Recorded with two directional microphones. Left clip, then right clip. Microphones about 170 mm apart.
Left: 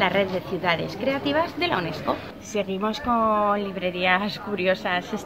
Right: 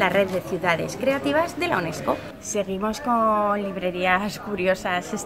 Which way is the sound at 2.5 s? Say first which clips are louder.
Even; 10° left (ahead or behind).